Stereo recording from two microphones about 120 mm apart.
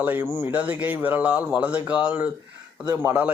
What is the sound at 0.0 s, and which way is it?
Speech, 15° right (ahead or behind).